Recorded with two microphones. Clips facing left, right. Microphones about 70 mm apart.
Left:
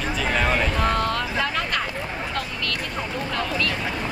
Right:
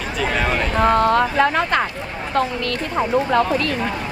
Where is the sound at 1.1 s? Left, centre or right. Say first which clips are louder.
Right 9 dB; right.